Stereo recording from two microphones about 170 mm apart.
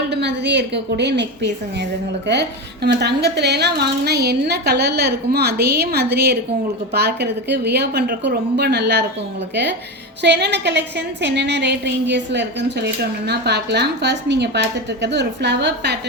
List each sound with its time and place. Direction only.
0.1 s a woman's voice: 90° right
10.2 s a woman's voice: 85° right